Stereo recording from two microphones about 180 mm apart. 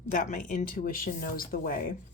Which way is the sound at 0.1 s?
45° left (ahead or behind).